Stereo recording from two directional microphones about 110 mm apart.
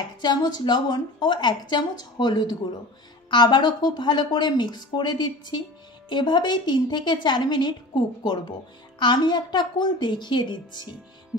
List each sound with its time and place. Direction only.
0.2 s a woman's voice: 40° left (ahead or behind)